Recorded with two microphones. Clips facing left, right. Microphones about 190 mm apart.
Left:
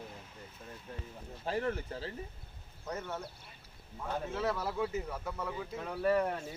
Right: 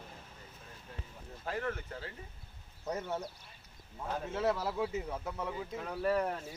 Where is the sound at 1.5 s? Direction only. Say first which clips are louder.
Left 3 dB; 30° left (ahead or behind).